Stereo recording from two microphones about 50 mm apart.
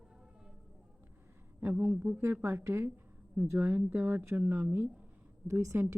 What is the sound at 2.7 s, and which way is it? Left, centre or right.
Speech, right.